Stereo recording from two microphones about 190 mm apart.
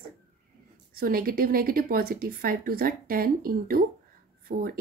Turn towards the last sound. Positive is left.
turn(degrees=-50)  # may be behind; listen again after turning